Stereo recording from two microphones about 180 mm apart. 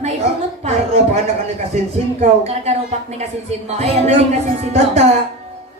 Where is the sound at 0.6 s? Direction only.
35° right (ahead or behind).